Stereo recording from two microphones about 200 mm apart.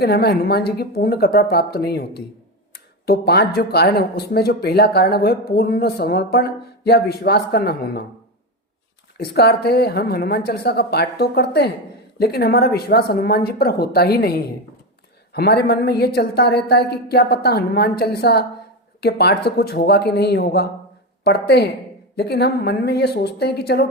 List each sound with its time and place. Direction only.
0.0 s speech: 50° left (ahead or behind)
9.1 s a woman's voice: 55° left (ahead or behind)